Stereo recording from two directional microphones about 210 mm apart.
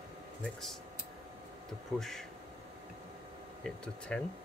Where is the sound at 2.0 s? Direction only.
Centre (ahead or behind).